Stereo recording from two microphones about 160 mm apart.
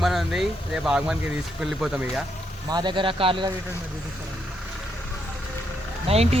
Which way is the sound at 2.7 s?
25° right (ahead or behind).